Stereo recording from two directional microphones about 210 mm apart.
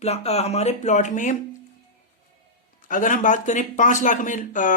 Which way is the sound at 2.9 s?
40° left (ahead or behind).